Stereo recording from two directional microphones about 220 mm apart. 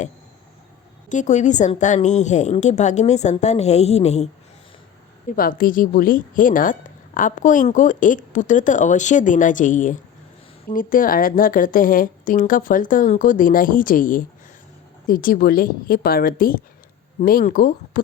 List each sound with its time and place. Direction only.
1.1 s a woman's voice: 35° left (ahead or behind)
5.4 s a woman's voice: 40° left (ahead or behind)